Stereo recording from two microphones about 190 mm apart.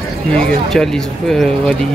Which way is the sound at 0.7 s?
Centre (ahead or behind).